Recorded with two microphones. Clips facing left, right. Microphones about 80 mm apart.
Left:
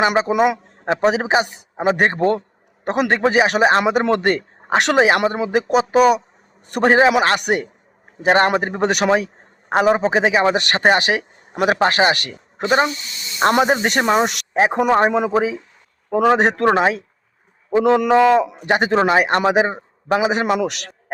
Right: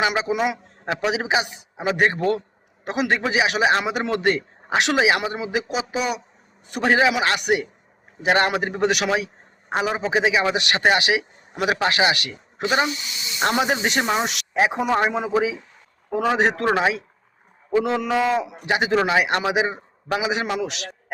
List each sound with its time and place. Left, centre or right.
0.0 s a man's voice: left
0.9 s a man's voice: left
18.2 s a man's voice: left